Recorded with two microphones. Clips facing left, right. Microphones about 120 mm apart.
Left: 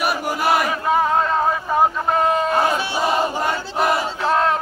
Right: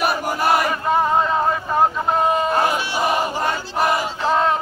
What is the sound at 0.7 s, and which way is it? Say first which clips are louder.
Vehicle: even; centre (ahead or behind).